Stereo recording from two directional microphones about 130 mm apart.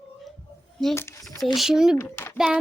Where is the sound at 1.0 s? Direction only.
20° left (ahead or behind).